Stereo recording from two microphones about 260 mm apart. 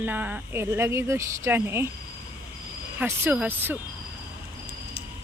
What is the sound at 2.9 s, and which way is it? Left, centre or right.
Speech, centre.